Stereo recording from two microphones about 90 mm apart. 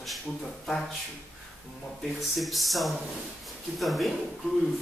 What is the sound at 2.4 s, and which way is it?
A man's voice, centre (ahead or behind).